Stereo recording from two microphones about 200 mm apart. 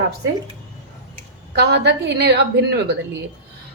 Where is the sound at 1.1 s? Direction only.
55° right (ahead or behind).